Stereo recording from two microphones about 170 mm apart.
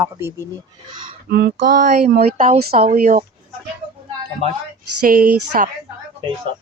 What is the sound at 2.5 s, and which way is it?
Speech, 60° right (ahead or behind).